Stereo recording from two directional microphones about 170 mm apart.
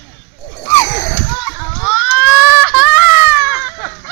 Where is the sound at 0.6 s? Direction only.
15° left (ahead or behind).